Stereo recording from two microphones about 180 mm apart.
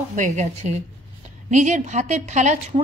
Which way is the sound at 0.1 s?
40° right (ahead or behind).